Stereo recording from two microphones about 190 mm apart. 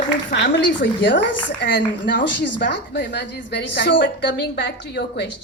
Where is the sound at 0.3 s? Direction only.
65° left (ahead or behind).